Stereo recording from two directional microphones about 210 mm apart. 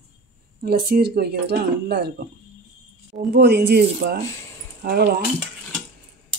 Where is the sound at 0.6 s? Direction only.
45° right (ahead or behind).